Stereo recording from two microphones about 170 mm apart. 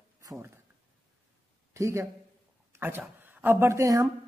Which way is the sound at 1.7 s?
15° right (ahead or behind).